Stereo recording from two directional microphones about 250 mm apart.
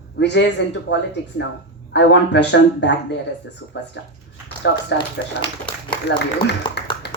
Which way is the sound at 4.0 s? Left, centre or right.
Left.